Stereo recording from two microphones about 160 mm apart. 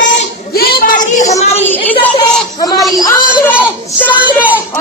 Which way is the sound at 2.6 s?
25° left (ahead or behind).